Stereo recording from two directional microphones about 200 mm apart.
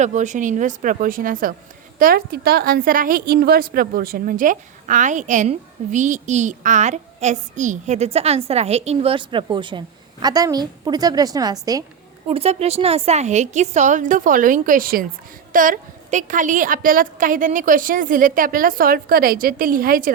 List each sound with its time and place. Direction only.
0.0 s a woman's voice: 35° right (ahead or behind); by 11.9 s 20° right (ahead or behind)
12.3 s a woman's voice: 30° right (ahead or behind)